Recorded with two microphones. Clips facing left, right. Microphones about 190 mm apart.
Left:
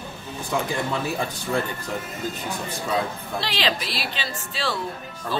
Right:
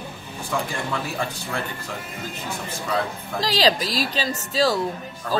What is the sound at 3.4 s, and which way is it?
Speech, 35° right (ahead or behind).